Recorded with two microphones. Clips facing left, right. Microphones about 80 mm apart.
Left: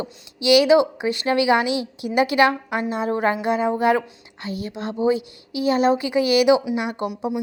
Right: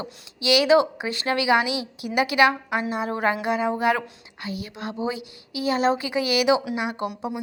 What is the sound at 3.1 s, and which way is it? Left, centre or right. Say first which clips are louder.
Speech: left 3 dB; left.